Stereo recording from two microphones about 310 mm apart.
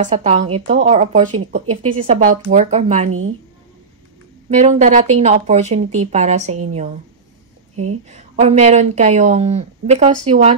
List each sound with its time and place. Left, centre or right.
0.0 s speech: right
4.6 s speech: right
7.7 s speech: right
8.1 s speech: right